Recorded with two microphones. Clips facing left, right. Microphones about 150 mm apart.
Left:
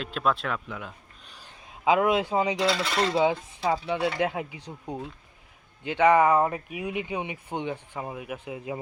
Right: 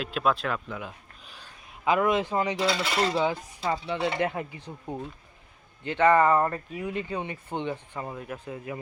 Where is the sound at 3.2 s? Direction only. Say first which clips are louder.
Left 3 dB; 20° left (ahead or behind).